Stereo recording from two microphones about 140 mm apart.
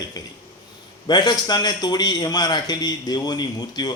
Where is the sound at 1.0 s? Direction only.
30° left (ahead or behind).